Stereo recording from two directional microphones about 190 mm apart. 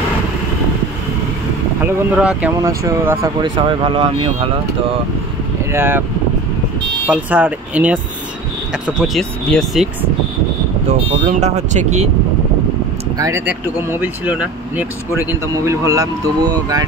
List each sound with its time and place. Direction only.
1.8 s speech: 5° right (ahead or behind); by 4.5 s 30° right (ahead or behind)
5.7 s speech: 10° right (ahead or behind)
7.1 s speech: 10° right (ahead or behind)
10.9 s speech: 35° right (ahead or behind)
13.2 s speech: 15° right (ahead or behind)